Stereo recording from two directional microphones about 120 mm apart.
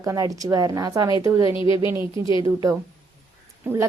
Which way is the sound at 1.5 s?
45° left (ahead or behind).